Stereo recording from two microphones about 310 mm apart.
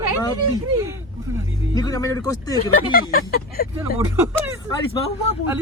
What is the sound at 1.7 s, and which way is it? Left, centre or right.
Speech, centre.